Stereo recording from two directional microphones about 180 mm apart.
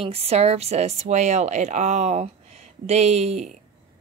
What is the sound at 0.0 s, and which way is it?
Speech, 35° right (ahead or behind).